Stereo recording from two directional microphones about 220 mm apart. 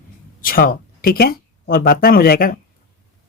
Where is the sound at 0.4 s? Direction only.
40° left (ahead or behind).